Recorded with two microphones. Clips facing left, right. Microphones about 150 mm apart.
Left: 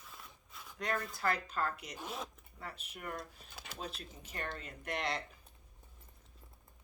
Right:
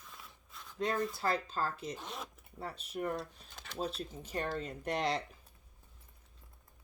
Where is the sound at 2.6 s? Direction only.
35° right (ahead or behind).